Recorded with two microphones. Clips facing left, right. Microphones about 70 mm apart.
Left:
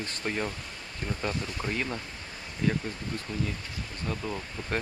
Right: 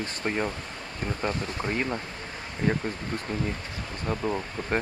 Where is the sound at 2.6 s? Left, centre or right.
Right.